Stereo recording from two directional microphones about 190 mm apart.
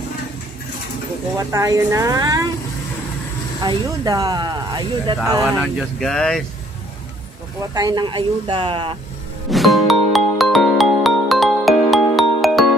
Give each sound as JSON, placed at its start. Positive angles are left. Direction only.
{"t": 1.5, "sound": "a woman's voice", "side_deg": -15}
{"t": 3.6, "sound": "speech", "side_deg": -20}
{"t": 5.4, "sound": "speech", "side_deg": 0}
{"t": 7.7, "sound": "speech", "side_deg": -20}
{"t": 9.5, "sound": "music", "side_deg": 0}